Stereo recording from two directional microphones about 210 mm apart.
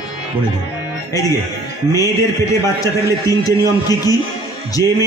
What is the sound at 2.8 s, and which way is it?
A man's voice, 15° left (ahead or behind).